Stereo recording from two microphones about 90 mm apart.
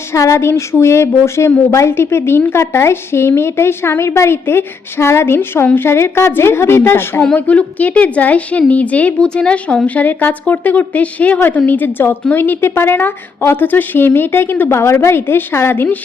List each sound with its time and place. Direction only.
0.1 s a woman's voice: 35° left (ahead or behind)
7.3 s a woman's voice: 15° left (ahead or behind)